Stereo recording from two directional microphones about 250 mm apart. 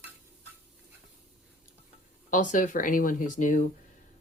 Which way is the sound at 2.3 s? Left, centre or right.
Left.